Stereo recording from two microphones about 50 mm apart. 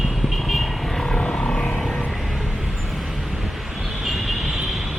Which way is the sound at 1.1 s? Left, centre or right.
Centre.